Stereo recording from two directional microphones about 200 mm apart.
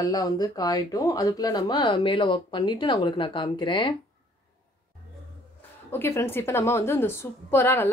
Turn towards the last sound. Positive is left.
turn(degrees=10)  # may be behind; listen again after turning